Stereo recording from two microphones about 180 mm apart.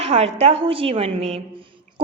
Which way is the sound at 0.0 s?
35° right (ahead or behind).